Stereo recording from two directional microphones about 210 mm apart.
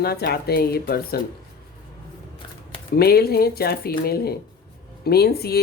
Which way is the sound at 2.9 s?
50° left (ahead or behind).